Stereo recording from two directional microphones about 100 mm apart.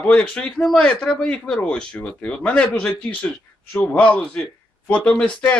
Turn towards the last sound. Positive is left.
turn(degrees=10)  # may be behind; listen again after turning